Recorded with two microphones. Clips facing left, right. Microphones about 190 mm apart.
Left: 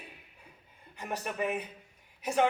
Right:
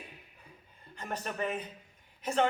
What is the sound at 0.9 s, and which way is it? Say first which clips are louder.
Speech: left 2 dB; 10° left (ahead or behind).